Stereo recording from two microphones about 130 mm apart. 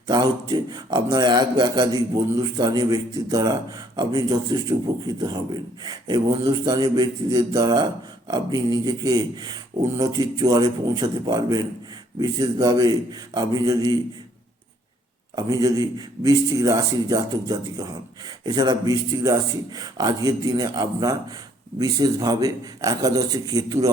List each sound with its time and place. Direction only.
0.1 s a man's voice: 30° right (ahead or behind)
15.4 s speech: 30° right (ahead or behind)